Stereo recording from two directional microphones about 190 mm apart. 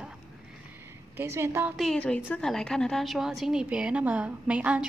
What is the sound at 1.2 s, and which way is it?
Speech, 15° right (ahead or behind).